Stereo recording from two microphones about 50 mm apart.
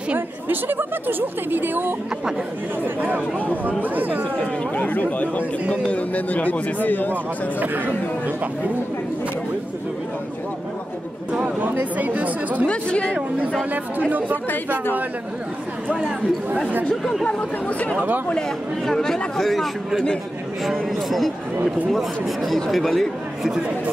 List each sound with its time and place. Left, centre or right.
0.5 s speech: right
4.7 s speech: left
7.6 s speech: right
11.3 s speech: right
12.6 s speech: left
16.9 s speech: centre
17.6 s speech: left
17.9 s speech: right
18.9 s speech: centre